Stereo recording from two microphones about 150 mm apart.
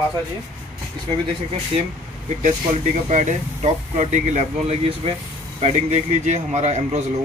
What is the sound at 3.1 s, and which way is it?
A man's voice, 50° right (ahead or behind).